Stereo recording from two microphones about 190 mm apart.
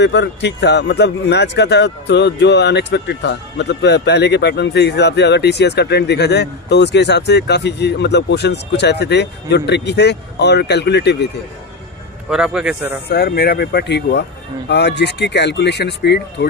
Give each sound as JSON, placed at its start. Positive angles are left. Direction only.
{"t": 0.0, "sound": "speech", "side_deg": 65}
{"t": 12.3, "sound": "a man's voice", "side_deg": -5}
{"t": 13.1, "sound": "speech", "side_deg": 55}